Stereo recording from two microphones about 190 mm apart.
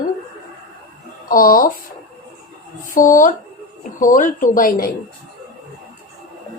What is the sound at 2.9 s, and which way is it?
Speech, 45° left (ahead or behind).